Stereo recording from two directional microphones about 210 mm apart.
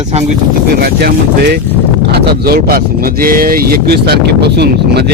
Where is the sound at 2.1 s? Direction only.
45° right (ahead or behind).